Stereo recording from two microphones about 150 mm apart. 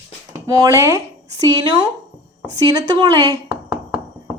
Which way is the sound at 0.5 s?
20° right (ahead or behind).